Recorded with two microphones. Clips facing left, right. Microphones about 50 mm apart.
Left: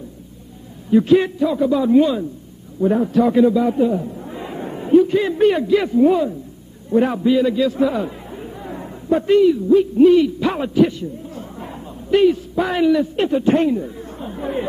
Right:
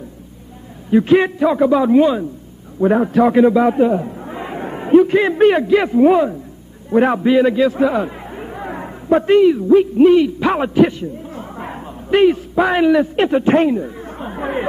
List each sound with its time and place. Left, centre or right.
0.8 s speech: right
2.0 s a man's voice: right
2.8 s a man's voice: right
3.1 s speech: right
4.2 s chatter: right
5.0 s speech: right
7.9 s chatter: right
10.0 s a man's voice: right
12.5 s a man's voice: right
13.0 s speech: right